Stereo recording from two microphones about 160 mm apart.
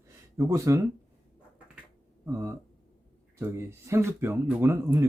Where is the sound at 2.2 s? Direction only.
20° right (ahead or behind).